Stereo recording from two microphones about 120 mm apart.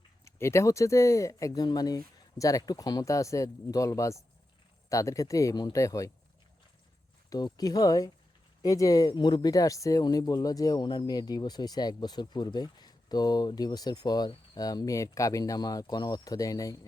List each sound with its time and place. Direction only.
0.3 s speech: 25° left (ahead or behind)
7.3 s speech: 35° left (ahead or behind)